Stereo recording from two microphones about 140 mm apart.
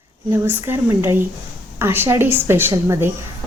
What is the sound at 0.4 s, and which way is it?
A woman's voice, 15° right (ahead or behind).